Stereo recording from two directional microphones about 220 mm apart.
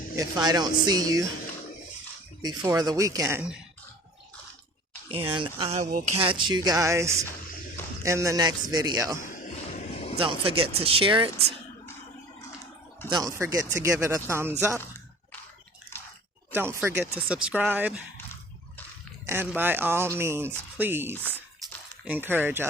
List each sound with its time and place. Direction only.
0.2 s speech: 20° right (ahead or behind)
2.4 s speech: 20° right (ahead or behind)
5.0 s speech: 25° right (ahead or behind)
9.2 s a sound: 35° left (ahead or behind)
10.2 s speech: 25° right (ahead or behind)
13.1 s speech: 15° right (ahead or behind)
16.5 s speech: 10° right (ahead or behind)
19.2 s speech: 10° right (ahead or behind)